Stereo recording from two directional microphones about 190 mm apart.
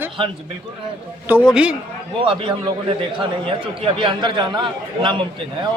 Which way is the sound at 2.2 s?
25° right (ahead or behind).